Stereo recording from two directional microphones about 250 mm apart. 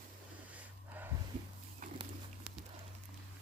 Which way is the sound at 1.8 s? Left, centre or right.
Right.